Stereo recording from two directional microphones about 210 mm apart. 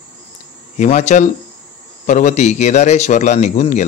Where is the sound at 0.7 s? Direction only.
35° left (ahead or behind).